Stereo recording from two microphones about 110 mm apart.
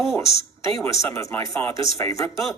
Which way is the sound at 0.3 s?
30° left (ahead or behind).